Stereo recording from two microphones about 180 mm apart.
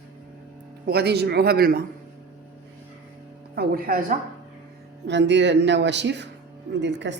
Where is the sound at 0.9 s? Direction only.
65° right (ahead or behind).